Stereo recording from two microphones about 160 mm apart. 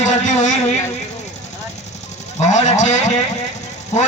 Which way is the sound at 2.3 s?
45° left (ahead or behind).